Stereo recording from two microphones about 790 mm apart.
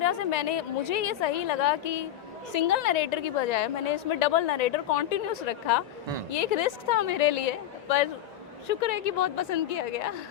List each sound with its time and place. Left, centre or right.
0.0 s a woman's voice: left